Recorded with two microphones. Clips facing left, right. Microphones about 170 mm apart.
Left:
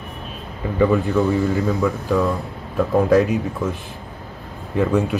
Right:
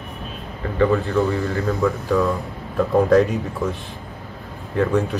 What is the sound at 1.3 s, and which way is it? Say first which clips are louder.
Speech: left 4 dB; 15° left (ahead or behind).